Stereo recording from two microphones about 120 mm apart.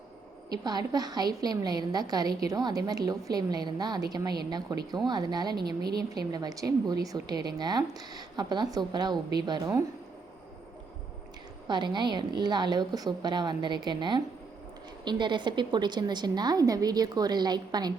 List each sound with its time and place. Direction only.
0.5 s a woman's voice: 35° right (ahead or behind)
11.7 s a woman's voice: 40° right (ahead or behind)